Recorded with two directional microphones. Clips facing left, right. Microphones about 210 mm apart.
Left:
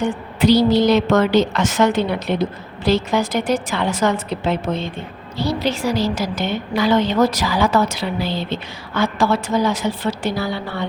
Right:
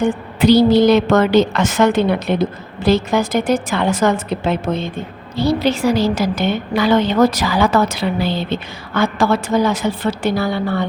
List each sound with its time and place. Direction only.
0.0 s a woman's voice: 55° right (ahead or behind)